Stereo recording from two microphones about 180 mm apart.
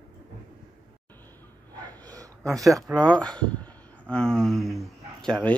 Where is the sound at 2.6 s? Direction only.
Centre (ahead or behind).